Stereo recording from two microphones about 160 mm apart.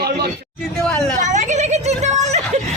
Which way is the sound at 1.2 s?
50° right (ahead or behind).